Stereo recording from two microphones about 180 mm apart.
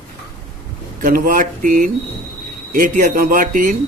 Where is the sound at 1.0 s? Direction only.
50° right (ahead or behind).